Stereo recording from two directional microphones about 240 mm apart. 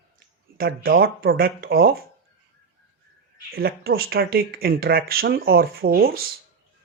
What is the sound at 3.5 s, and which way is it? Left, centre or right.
Speech, right.